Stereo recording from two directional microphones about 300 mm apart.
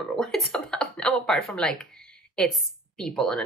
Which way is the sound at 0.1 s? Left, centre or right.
Centre.